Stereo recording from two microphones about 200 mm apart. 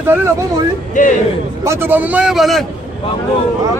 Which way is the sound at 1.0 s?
40° left (ahead or behind).